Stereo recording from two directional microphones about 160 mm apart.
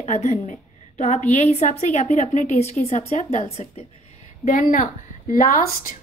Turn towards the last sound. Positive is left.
turn(degrees=60)  # may be behind; listen again after turning